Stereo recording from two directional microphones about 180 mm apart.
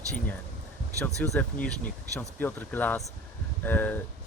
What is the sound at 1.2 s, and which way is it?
Speech, 5° left (ahead or behind).